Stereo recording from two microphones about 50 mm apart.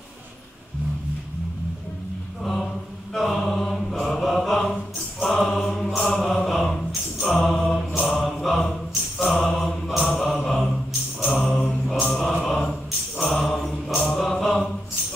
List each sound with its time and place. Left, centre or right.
2.4 s mantra: centre
5.2 s chant: centre
6.8 s music: centre
8.0 s mantra: centre
11.2 s music: centre
11.5 s mantra: centre
12.1 s mantra: centre
13.2 s music: centre